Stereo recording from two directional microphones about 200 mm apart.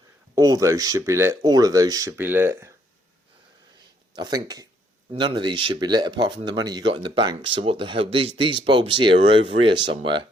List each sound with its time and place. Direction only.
0.3 s speech: 15° right (ahead or behind)
4.1 s speech: 20° right (ahead or behind)